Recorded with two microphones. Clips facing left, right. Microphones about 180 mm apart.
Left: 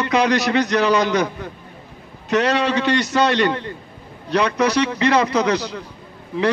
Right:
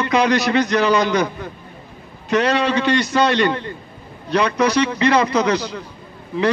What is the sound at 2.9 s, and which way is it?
A man's voice, 70° left (ahead or behind).